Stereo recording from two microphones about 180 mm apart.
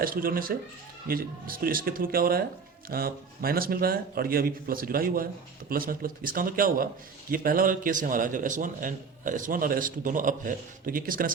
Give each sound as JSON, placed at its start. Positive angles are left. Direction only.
{"t": 0.0, "sound": "a man's voice", "side_deg": -55}